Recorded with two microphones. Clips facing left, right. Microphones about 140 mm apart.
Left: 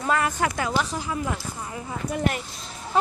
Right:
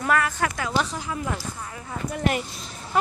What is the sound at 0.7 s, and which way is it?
Speech, 10° left (ahead or behind).